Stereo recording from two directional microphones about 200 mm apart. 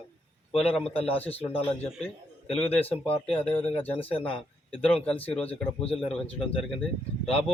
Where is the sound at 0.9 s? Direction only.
30° left (ahead or behind).